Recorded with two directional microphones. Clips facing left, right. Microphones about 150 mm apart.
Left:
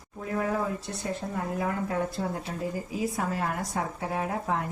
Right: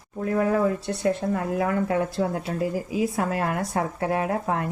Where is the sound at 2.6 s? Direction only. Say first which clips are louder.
Right 6 dB; 80° right.